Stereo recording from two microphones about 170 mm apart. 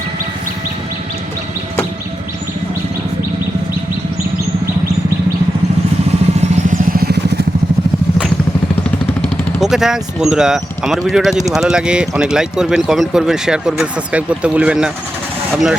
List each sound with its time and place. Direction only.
6.4 s vehicle: 55° right (ahead or behind)
9.6 s speech: centre (ahead or behind)